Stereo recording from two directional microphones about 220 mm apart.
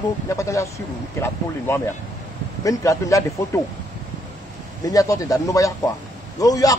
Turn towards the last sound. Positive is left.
turn(degrees=15)  # may be behind; listen again after turning